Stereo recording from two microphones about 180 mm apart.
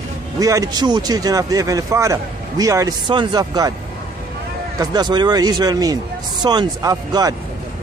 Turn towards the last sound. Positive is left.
turn(degrees=-20)  # may be behind; listen again after turning